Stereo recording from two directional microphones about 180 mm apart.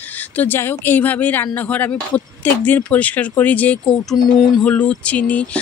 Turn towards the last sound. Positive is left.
turn(degrees=10)  # may be behind; listen again after turning